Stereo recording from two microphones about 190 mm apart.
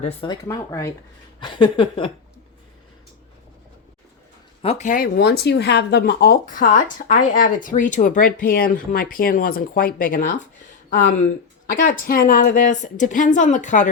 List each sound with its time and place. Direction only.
0.3 s speech: 15° left (ahead or behind)
1.4 s speech: 25° left (ahead or behind)
4.6 s speech: 35° left (ahead or behind)